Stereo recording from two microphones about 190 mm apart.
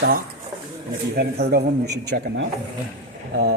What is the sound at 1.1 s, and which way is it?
A man's voice, 60° right (ahead or behind).